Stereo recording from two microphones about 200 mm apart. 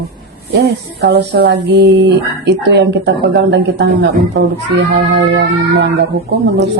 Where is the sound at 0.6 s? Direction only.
55° right (ahead or behind).